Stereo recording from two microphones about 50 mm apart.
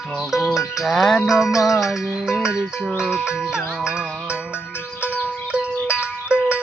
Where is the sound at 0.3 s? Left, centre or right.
Centre.